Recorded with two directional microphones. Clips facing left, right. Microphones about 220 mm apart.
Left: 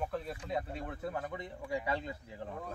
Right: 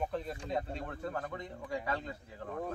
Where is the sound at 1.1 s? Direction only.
10° left (ahead or behind).